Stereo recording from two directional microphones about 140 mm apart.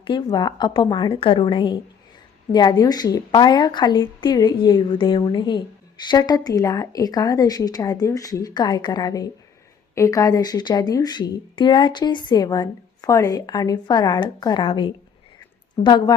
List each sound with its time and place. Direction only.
0.0 s a woman's voice: 35° left (ahead or behind)